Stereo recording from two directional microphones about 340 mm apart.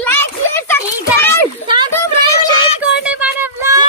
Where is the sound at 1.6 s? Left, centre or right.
Centre.